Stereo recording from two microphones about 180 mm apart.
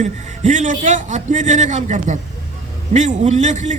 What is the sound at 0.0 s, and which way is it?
A man's voice, 45° right (ahead or behind).